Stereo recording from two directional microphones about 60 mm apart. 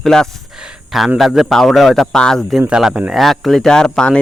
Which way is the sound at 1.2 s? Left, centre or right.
Centre.